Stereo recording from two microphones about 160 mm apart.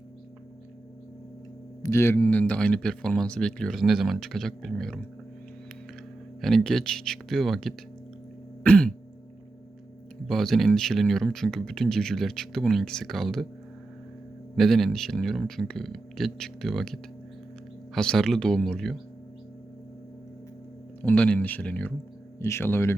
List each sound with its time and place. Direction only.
1.8 s speech: 15° left (ahead or behind)
6.4 s speech: centre (ahead or behind)
10.2 s speech: centre (ahead or behind)
14.5 s speech: centre (ahead or behind)
21.0 s speech: 10° left (ahead or behind)